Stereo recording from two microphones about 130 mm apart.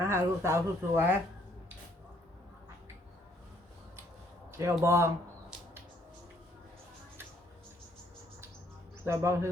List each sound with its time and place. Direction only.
0.0 s speech: 20° right (ahead or behind)
4.8 s speech: 20° right (ahead or behind)
9.0 s speech: 20° right (ahead or behind)